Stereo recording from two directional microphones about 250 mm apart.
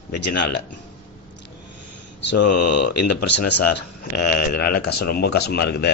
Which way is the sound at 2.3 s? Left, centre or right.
Left.